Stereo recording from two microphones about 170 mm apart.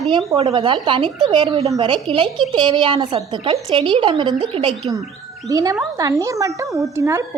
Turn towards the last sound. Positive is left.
turn(degrees=-15)  # may be behind; listen again after turning